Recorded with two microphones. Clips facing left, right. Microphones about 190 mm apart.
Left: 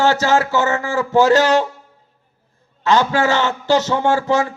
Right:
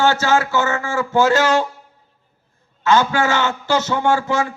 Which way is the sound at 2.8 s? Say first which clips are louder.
Left 1 dB; 35° left (ahead or behind).